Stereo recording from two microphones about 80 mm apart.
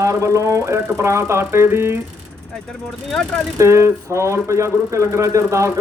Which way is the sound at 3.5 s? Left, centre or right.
Right.